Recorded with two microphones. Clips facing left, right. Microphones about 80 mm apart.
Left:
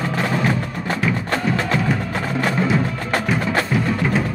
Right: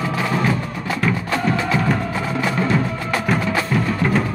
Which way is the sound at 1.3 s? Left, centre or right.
Left.